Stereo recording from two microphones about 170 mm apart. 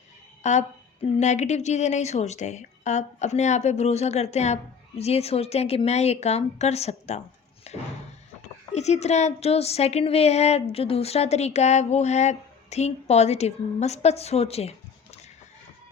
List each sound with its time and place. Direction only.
0.4 s speech: 45° left (ahead or behind)
7.7 s slam: 40° left (ahead or behind)
8.7 s speech: 40° left (ahead or behind)